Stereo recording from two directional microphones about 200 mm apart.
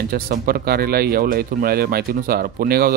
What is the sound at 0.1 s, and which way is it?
A man's voice, 50° right (ahead or behind).